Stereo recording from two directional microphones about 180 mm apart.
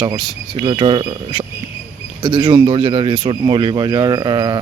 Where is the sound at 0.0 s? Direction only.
25° right (ahead or behind).